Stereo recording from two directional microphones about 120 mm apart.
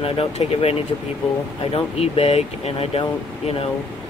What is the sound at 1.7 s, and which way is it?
Speech, 55° left (ahead or behind).